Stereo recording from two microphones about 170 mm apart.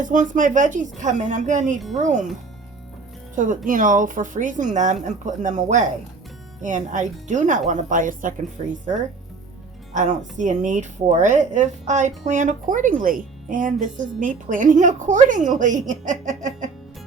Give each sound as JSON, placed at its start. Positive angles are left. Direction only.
{"t": 0.0, "sound": "speech", "side_deg": -50}
{"t": 3.3, "sound": "speech", "side_deg": -50}
{"t": 8.6, "sound": "speech", "side_deg": -40}
{"t": 9.9, "sound": "speech", "side_deg": -45}